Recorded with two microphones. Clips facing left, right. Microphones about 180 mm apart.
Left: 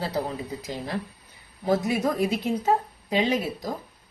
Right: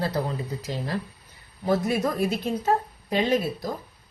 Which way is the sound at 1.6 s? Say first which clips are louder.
Even; 20° left (ahead or behind).